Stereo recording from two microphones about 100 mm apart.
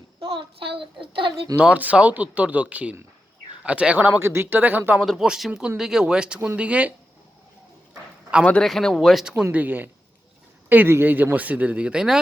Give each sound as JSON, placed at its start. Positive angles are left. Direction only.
{"t": 0.2, "sound": "a child's voice", "side_deg": -65}
{"t": 1.5, "sound": "speech", "side_deg": -15}
{"t": 4.9, "sound": "speech", "side_deg": -5}
{"t": 8.6, "sound": "speech", "side_deg": 0}
{"t": 9.3, "sound": "speech", "side_deg": -15}